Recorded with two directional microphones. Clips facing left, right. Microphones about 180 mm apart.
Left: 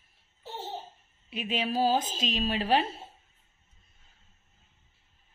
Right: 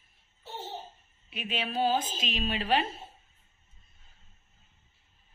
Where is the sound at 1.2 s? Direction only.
40° left (ahead or behind).